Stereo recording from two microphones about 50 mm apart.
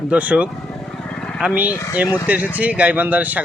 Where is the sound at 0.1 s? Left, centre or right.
Right.